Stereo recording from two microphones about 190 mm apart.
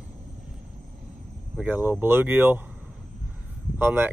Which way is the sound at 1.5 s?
10° right (ahead or behind).